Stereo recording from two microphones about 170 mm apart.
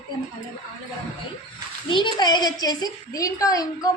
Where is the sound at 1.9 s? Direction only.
25° left (ahead or behind).